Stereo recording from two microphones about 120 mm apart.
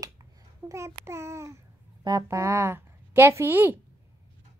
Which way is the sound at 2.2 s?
25° right (ahead or behind).